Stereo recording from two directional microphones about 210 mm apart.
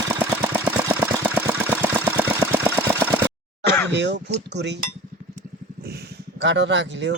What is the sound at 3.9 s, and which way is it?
Speech, 55° right (ahead or behind).